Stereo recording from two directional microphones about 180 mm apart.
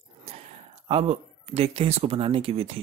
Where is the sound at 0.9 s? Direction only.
35° right (ahead or behind).